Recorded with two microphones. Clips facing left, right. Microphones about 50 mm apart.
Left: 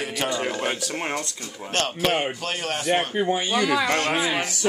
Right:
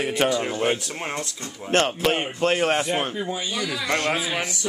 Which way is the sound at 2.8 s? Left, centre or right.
Left.